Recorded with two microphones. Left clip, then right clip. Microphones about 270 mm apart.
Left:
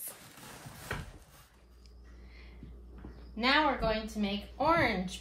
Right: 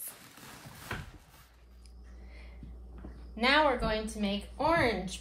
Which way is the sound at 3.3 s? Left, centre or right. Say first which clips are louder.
Right 2 dB; right.